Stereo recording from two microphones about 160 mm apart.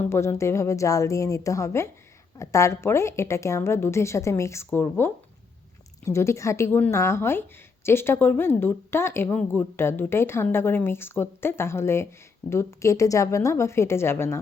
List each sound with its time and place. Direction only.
0.0 s a woman's voice: 15° left (ahead or behind)